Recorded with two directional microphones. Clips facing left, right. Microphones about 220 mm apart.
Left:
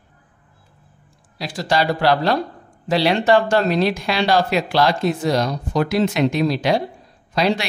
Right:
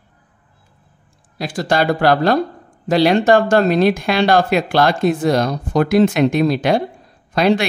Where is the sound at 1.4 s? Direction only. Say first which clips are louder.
Right 3 dB; 50° right (ahead or behind).